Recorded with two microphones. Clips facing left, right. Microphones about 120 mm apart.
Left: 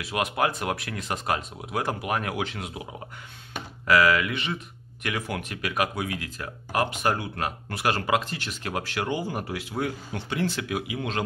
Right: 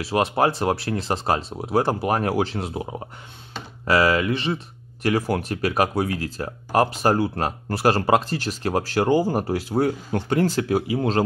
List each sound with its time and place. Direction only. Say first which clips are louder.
0.0 s speech: right 6 dB; 35° right (ahead or behind)